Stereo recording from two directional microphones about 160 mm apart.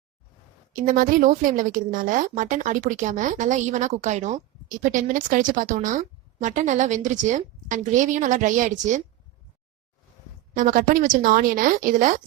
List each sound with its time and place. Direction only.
0.7 s a woman's voice: 55° right (ahead or behind)
10.5 s a woman's voice: 55° right (ahead or behind)